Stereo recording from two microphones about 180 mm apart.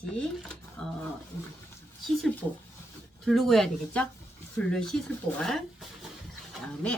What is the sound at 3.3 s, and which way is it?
Speech, centre (ahead or behind).